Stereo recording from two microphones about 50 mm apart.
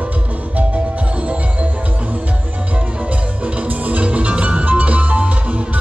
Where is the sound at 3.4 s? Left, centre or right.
Right.